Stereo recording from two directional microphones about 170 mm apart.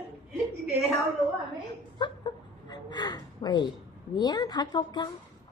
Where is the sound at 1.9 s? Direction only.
25° left (ahead or behind).